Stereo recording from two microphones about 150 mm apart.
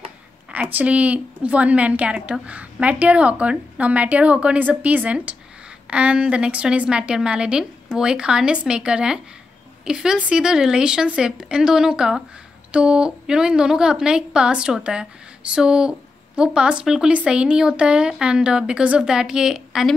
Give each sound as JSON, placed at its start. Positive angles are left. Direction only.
{"t": 0.5, "sound": "a woman's voice", "side_deg": -10}